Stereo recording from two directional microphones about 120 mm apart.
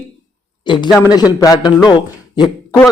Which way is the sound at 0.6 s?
40° left (ahead or behind).